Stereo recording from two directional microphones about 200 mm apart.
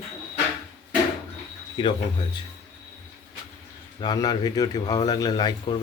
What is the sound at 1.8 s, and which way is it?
Speech, 20° left (ahead or behind).